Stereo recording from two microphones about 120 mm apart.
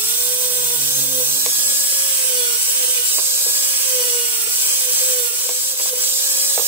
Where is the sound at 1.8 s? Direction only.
40° right (ahead or behind).